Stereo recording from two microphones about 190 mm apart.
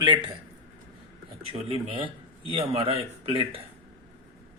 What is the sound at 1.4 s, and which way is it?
Speech, 30° right (ahead or behind).